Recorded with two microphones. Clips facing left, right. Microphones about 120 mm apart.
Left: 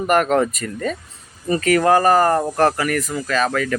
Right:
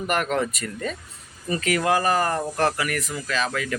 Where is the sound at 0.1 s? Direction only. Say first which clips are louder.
Left 8 dB; 45° left (ahead or behind).